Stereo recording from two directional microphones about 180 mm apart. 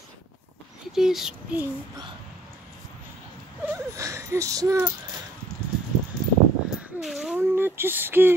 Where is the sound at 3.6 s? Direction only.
15° right (ahead or behind).